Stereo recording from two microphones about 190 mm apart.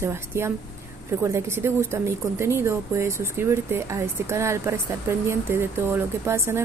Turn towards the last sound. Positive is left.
turn(degrees=-15)  # may be behind; listen again after turning